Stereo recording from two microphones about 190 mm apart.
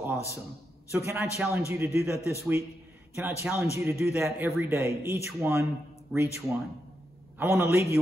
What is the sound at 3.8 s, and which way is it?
Speech, 10° right (ahead or behind).